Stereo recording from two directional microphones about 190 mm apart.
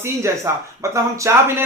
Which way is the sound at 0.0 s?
15° right (ahead or behind).